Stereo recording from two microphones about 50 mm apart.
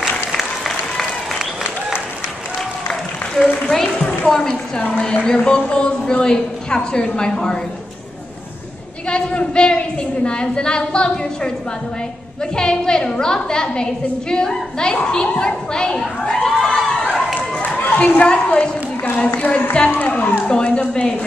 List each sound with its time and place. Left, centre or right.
0.3 s applause: centre
2.9 s applause: centre
4.3 s a woman's voice: centre
4.7 s a woman's voice: left
9.1 s a woman's voice: left
12.5 s a woman's voice: centre
17.7 s a woman's voice: left